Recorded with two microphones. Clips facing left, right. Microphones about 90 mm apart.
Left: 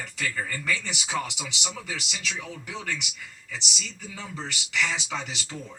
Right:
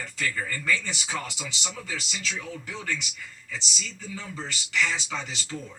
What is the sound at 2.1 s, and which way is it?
Speech, 15° left (ahead or behind).